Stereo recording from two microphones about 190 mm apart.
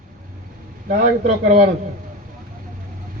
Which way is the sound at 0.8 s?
45° right (ahead or behind).